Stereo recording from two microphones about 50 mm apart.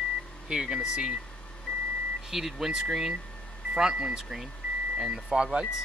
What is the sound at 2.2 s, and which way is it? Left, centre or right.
Speech, centre.